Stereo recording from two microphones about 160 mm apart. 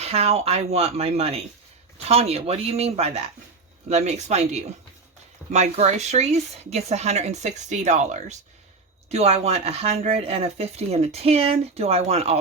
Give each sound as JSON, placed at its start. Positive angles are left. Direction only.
{"t": 0.0, "sound": "speech", "side_deg": -40}